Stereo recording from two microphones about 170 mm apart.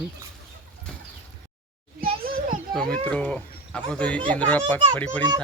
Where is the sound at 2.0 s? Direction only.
55° right (ahead or behind).